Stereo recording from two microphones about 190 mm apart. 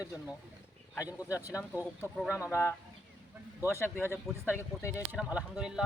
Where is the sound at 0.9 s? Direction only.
15° left (ahead or behind).